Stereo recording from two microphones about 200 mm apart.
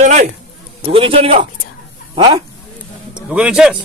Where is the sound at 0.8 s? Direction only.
25° right (ahead or behind).